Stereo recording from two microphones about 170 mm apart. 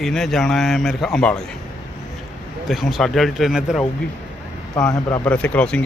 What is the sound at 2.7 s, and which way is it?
Speech, centre (ahead or behind).